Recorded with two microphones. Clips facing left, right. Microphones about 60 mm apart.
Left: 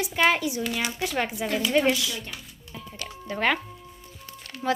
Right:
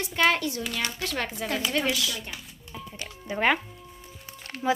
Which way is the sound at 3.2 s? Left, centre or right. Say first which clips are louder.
Right 1 dB; centre.